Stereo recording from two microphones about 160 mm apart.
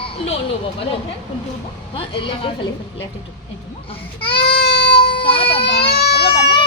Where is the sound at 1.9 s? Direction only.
35° left (ahead or behind).